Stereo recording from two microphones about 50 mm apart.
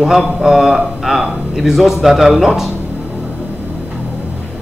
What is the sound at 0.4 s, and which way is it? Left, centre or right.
A man's voice, centre.